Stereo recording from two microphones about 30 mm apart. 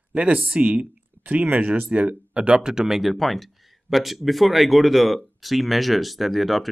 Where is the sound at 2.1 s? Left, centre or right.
Right.